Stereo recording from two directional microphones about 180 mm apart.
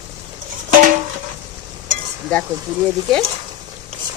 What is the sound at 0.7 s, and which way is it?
Music, 45° right (ahead or behind).